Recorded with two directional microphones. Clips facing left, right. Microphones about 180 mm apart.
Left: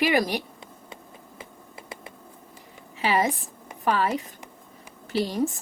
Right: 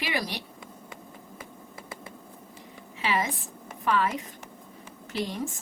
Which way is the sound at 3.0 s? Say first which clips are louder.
Left 5 dB; 40° left (ahead or behind).